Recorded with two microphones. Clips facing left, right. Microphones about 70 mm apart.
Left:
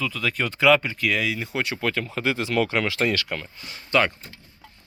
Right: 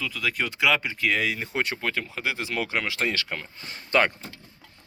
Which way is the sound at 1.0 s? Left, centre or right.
Right.